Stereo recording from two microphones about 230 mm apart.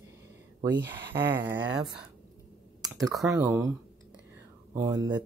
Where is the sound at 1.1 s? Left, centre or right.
Centre.